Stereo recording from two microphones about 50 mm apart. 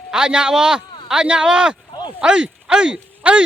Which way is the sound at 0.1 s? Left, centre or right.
Centre.